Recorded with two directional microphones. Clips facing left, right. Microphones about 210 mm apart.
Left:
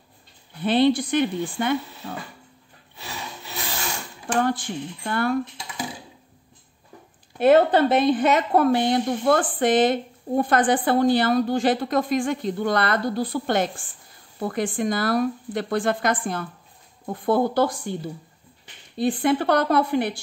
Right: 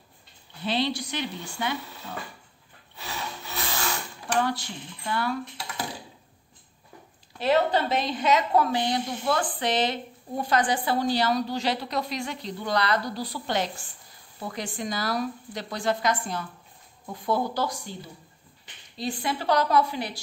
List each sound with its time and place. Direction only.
0.7 s a woman's voice: 55° left (ahead or behind)
4.4 s a woman's voice: 50° left (ahead or behind)
7.3 s a woman's voice: 55° left (ahead or behind)